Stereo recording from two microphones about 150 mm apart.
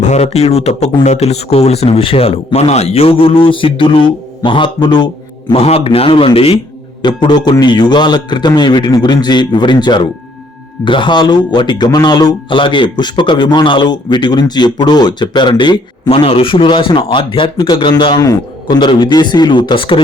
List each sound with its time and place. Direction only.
0.0 s a man's voice: 50° left (ahead or behind); by 5.0 s 30° left (ahead or behind)
5.5 s a man's voice: 40° left (ahead or behind)